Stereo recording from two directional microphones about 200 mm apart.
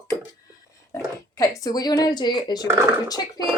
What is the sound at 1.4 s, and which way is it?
Speech, 20° left (ahead or behind).